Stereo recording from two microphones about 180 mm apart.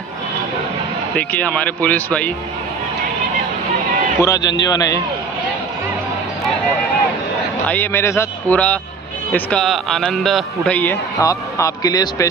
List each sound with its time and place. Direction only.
1.1 s a man's voice: 10° left (ahead or behind)
4.2 s a man's voice: 20° left (ahead or behind)
7.6 s a man's voice: 10° left (ahead or behind)